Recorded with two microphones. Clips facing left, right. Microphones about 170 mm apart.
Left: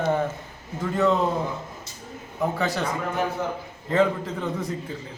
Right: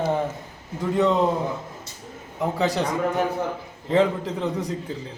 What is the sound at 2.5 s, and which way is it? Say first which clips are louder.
Speech: right 3 dB; 15° right (ahead or behind).